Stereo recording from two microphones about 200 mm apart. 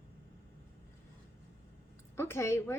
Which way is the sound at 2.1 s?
15° left (ahead or behind).